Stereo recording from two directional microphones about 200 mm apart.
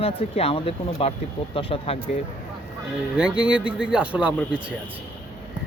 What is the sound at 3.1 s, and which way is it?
Speech, 5° right (ahead or behind).